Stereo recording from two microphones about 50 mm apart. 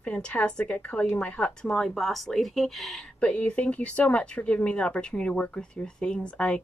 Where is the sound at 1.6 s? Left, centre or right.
Centre.